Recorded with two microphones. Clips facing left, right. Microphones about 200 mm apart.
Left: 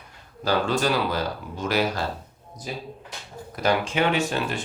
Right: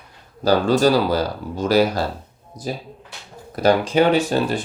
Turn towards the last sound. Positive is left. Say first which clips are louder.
# right 7 dB
turn(degrees=-35)  # may be behind; listen again after turning